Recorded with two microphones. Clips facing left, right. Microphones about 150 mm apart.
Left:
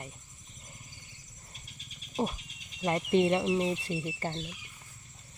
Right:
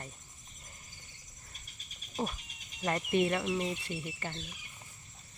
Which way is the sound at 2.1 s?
25° left (ahead or behind).